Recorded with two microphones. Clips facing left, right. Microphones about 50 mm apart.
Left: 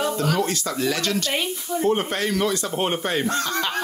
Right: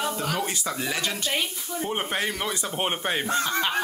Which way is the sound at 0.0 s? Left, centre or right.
Centre.